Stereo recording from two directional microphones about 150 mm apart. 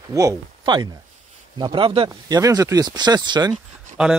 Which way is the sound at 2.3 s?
25° right (ahead or behind).